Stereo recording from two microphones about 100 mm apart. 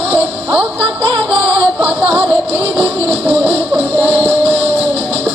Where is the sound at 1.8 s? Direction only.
15° right (ahead or behind).